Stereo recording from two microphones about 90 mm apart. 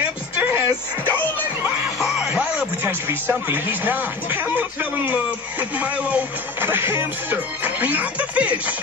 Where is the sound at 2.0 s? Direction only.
10° right (ahead or behind).